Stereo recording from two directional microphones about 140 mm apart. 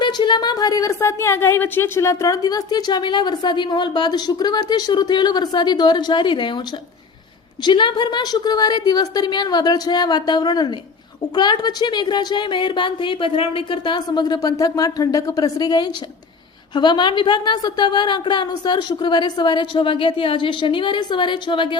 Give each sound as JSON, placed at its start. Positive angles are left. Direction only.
{"t": 0.0, "sound": "a woman's voice", "side_deg": 35}
{"t": 7.6, "sound": "a woman's voice", "side_deg": 35}